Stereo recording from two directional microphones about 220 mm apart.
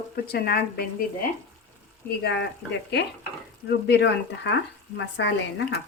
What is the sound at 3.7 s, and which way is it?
Speech, 50° left (ahead or behind).